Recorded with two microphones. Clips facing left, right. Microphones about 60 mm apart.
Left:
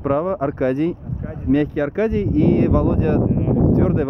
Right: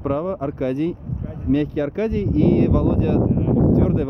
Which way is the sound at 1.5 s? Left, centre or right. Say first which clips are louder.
Left 2 dB; left.